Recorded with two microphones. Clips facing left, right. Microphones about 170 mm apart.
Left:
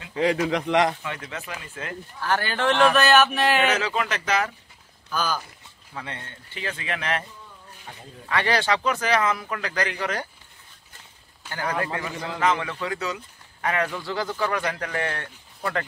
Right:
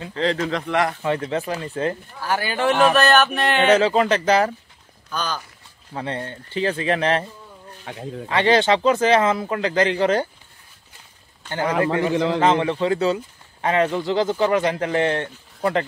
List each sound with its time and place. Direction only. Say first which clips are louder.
0.1 s speech: even; 10° left (ahead or behind)
1.0 s speech: right 11 dB; 35° right (ahead or behind)
2.2 s speech: right 2 dB; 10° right (ahead or behind)
3.6 s speech: right 8 dB; 30° right (ahead or behind)
5.1 s speech: even; 5° left (ahead or behind)
5.9 s speech: right 9 dB; 35° right (ahead or behind)
7.9 s speech: right 9 dB; 90° right
8.3 s speech: right 6 dB; 25° right (ahead or behind)
11.8 s speech: right 9 dB; 25° right (ahead or behind)
12.1 s a man's voice: right 12 dB; 85° right
12.4 s speech: right 6 dB; 30° right (ahead or behind)